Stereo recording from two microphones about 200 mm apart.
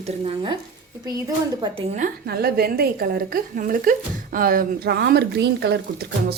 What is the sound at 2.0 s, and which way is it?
A woman's voice, 50° right (ahead or behind).